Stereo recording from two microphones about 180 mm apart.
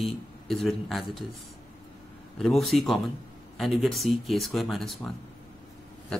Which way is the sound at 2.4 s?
Centre (ahead or behind).